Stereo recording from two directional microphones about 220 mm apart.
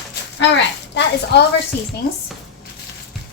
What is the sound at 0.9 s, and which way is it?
Speech, 50° left (ahead or behind).